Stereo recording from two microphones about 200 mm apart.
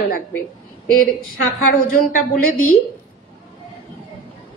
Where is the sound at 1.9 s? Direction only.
45° left (ahead or behind).